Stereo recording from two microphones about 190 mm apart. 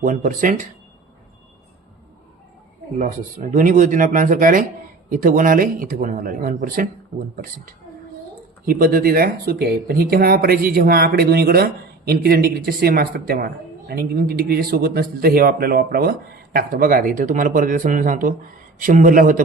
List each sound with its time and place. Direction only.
0.0 s speech: 45° right (ahead or behind)
3.0 s speech: 40° right (ahead or behind)
8.6 s speech: 50° right (ahead or behind)